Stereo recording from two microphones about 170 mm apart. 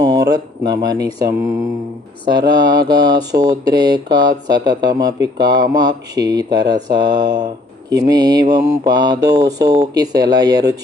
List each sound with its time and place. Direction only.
0.0 s speech: 25° right (ahead or behind)